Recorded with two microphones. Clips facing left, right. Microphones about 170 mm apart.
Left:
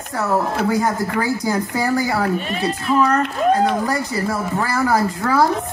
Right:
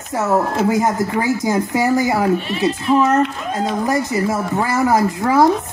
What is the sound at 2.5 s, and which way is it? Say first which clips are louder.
Speech: right 3 dB; 40° left (ahead or behind).